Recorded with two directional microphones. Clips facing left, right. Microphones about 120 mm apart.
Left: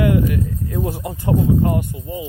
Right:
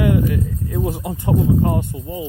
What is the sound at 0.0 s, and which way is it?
Speech, 25° right (ahead or behind).